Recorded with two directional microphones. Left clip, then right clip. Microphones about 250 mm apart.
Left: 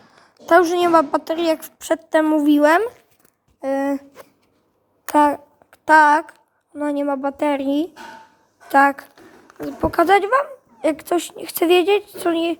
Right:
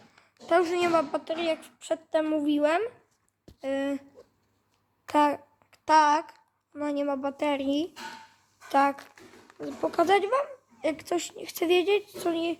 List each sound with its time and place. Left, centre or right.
0.2 s a woman's voice: left
3.6 s a woman's voice: centre
5.1 s a woman's voice: centre